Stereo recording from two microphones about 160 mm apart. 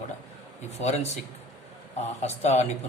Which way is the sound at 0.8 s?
45° left (ahead or behind).